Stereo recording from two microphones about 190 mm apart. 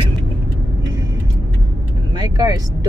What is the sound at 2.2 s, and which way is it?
Speech, 20° right (ahead or behind).